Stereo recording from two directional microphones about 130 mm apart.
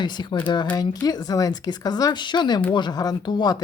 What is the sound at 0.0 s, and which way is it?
Speech, 35° left (ahead or behind).